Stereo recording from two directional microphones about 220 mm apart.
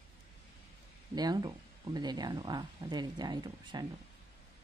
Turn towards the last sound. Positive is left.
turn(degrees=-20)  # may be behind; listen again after turning